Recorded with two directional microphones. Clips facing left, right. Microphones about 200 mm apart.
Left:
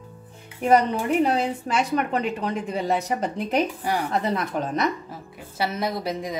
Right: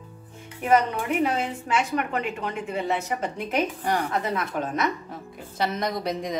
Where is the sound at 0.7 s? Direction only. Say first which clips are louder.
Left 3 dB; 35° left (ahead or behind).